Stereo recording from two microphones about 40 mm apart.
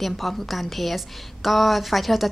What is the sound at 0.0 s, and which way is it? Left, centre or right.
A woman's voice, centre.